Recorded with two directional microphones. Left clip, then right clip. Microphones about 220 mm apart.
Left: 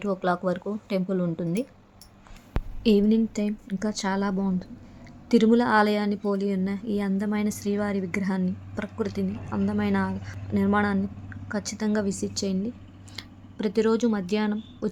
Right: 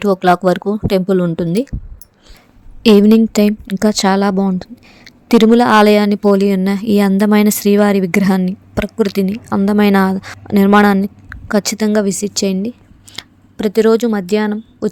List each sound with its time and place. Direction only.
0.0 s a woman's voice: 45° right (ahead or behind)
2.8 s a woman's voice: 45° right (ahead or behind)